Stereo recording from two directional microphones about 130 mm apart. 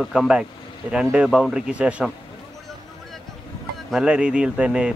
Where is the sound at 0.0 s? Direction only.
Centre (ahead or behind).